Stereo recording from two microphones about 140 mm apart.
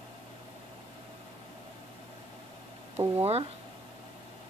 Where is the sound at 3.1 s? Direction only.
45° right (ahead or behind).